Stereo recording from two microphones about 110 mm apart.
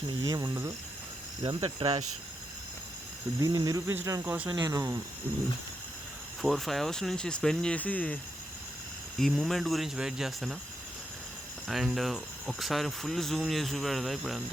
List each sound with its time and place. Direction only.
0.1 s speech: 40° right (ahead or behind)
1.6 s speech: 50° right (ahead or behind)
3.4 s speech: 35° right (ahead or behind); by 4.5 s 15° right (ahead or behind)
4.5 s speech: 30° right (ahead or behind)
6.4 s speech: centre (ahead or behind)
9.1 s speech: centre (ahead or behind)
11.7 s speech: centre (ahead or behind)